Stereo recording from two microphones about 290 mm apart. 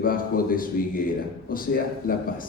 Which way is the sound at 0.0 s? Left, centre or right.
Left.